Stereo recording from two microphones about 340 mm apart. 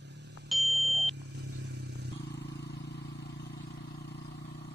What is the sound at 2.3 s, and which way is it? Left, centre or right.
Vehicle, left.